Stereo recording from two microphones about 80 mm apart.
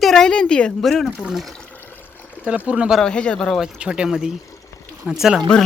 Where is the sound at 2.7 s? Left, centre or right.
Centre.